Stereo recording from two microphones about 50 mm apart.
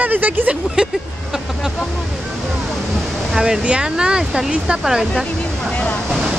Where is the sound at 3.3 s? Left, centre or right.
Centre.